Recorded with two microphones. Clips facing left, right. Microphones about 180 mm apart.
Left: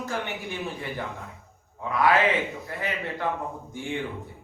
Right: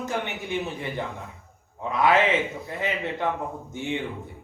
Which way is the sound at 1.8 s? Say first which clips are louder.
Right 1 dB; 20° right (ahead or behind).